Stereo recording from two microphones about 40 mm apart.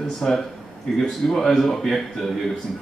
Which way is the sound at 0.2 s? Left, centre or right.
Centre.